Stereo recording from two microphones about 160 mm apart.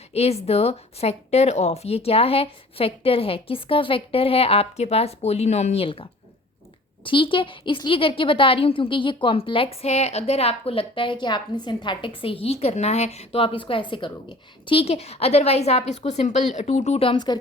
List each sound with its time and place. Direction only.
0.1 s a woman's voice: 40° left (ahead or behind)